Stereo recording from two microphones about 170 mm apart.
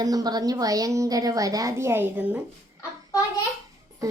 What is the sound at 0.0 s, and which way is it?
A woman's voice, 20° right (ahead or behind).